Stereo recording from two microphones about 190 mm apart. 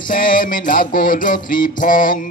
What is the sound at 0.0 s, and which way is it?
Music, 45° left (ahead or behind).